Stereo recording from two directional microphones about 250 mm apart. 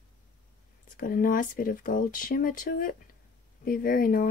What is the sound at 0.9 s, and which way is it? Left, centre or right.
Speech, left.